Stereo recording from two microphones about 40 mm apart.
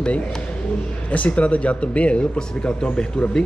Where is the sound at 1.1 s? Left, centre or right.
Left.